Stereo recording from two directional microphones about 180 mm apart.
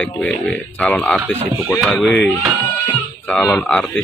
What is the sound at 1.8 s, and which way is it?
Speech, 5° left (ahead or behind).